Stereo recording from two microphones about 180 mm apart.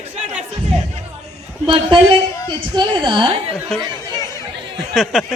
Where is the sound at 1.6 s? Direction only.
30° right (ahead or behind).